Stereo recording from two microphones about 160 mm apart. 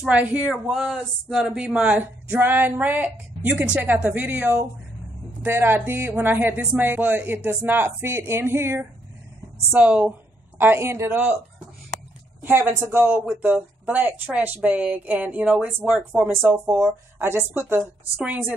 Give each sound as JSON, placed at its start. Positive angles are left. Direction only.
{"t": 0.0, "sound": "speech", "side_deg": -10}
{"t": 12.4, "sound": "speech", "side_deg": -15}